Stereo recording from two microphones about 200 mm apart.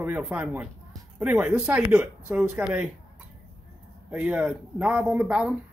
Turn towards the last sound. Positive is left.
turn(degrees=-5)  # may be behind; listen again after turning